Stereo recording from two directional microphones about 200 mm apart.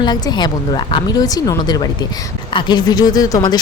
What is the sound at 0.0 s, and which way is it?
A woman's voice, 20° left (ahead or behind).